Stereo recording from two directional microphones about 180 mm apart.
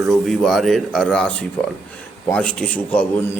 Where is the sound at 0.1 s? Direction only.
Centre (ahead or behind).